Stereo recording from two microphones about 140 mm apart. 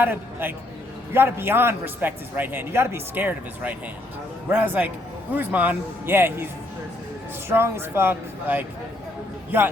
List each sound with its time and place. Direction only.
0.0 s a man's voice: 15° right (ahead or behind)